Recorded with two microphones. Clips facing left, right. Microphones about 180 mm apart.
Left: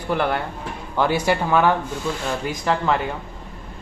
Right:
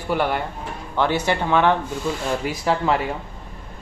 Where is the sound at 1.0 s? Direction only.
10° left (ahead or behind).